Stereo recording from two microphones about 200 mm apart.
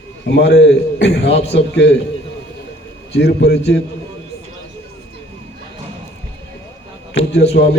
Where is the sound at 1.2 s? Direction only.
30° left (ahead or behind).